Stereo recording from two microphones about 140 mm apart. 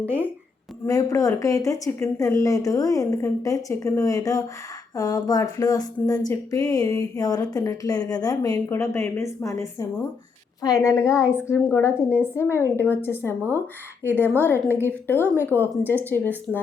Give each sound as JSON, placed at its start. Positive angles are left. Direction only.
{"t": 0.0, "sound": "speech", "side_deg": -15}
{"t": 0.9, "sound": "speech", "side_deg": 25}